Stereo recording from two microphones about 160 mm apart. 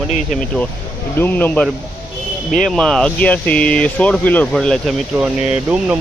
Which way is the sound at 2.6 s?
5° left (ahead or behind).